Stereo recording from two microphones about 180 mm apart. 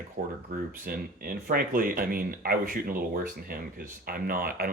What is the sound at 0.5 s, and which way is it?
Speech, 50° right (ahead or behind).